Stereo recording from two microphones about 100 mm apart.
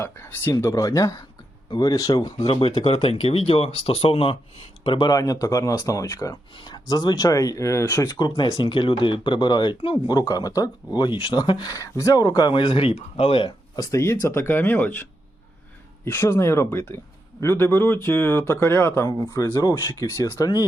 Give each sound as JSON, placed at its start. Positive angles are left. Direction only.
{"t": 0.0, "sound": "speech", "side_deg": 25}
{"t": 0.5, "sound": "speech", "side_deg": 35}
{"t": 2.5, "sound": "speech", "side_deg": 75}
{"t": 4.8, "sound": "speech", "side_deg": 50}
{"t": 5.1, "sound": "speech", "side_deg": 35}
{"t": 8.2, "sound": "speech", "side_deg": 45}
{"t": 10.2, "sound": "speech", "side_deg": 40}
{"t": 12.5, "sound": "speech", "side_deg": 60}
{"t": 13.7, "sound": "speech", "side_deg": 35}
{"t": 16.0, "sound": "speech", "side_deg": 25}
{"t": 19.0, "sound": "speech", "side_deg": 35}